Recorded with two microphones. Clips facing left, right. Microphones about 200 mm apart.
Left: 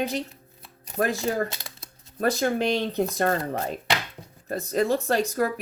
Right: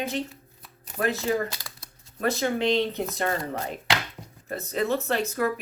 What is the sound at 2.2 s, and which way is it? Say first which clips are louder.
Speech: left 2 dB; 40° left (ahead or behind).